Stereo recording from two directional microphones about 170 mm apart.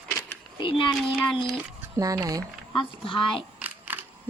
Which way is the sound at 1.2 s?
Centre (ahead or behind).